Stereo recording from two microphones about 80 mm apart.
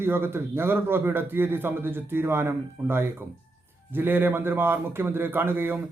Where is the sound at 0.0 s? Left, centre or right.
Right.